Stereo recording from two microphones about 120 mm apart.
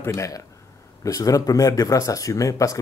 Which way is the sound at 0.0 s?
25° left (ahead or behind).